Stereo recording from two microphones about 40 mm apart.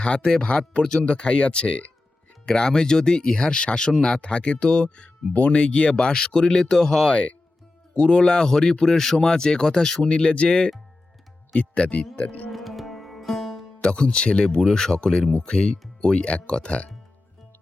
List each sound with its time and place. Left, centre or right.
0.0 s speech: left
7.1 s speech: left; by 10.0 s centre
10.0 s speech: left
12.5 s music: centre
13.8 s speech: left